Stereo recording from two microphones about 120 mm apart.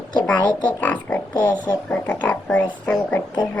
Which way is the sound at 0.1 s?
10° left (ahead or behind).